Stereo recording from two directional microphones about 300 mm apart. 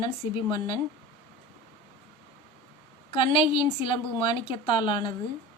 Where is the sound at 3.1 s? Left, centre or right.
Centre.